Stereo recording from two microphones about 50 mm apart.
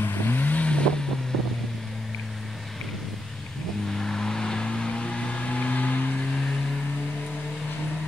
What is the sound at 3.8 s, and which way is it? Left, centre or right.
Vehicle, centre.